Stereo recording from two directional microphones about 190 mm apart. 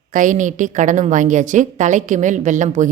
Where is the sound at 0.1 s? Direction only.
40° right (ahead or behind).